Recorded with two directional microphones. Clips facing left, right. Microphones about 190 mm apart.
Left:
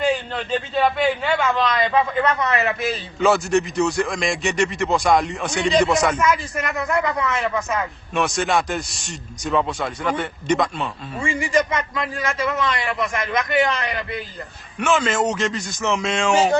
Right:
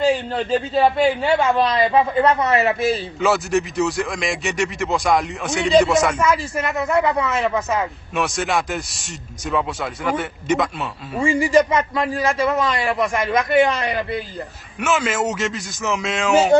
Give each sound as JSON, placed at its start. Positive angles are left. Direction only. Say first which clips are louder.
{"t": 0.1, "sound": "a man's voice", "louder": "right 3 dB", "side_deg": -35}
{"t": 3.2, "sound": "a man's voice", "louder": "left 4 dB", "side_deg": -5}
{"t": 6.2, "sound": "speech", "louder": "right 1 dB", "side_deg": -30}
{"t": 8.1, "sound": "a man's voice", "louder": "left 1 dB", "side_deg": 0}
{"t": 11.2, "sound": "a man's voice", "louder": "right 5 dB", "side_deg": -35}
{"t": 14.8, "sound": "speech", "louder": "left 1 dB", "side_deg": -5}